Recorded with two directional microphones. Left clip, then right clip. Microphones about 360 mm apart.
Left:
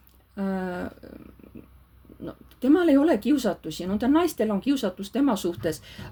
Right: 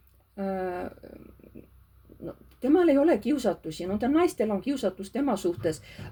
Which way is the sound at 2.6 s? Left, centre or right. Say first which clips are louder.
Left 1 dB; left.